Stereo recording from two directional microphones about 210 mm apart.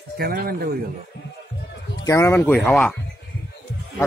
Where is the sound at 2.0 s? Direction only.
15° left (ahead or behind).